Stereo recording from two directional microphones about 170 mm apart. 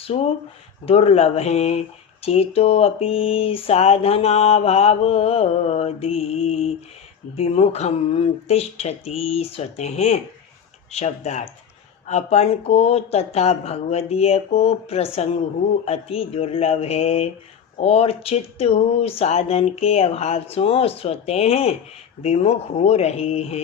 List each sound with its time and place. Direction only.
0.1 s speech: 40° left (ahead or behind)